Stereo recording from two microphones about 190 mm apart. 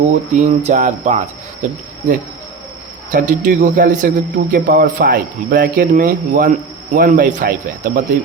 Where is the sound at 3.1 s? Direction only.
40° right (ahead or behind).